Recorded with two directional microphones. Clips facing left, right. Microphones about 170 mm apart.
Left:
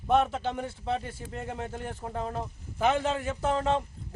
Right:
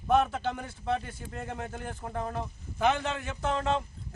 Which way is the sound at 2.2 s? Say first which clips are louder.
Even; 20° left (ahead or behind).